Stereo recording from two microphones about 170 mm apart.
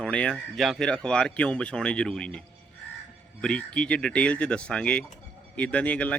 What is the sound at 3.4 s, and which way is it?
Speech, 5° left (ahead or behind).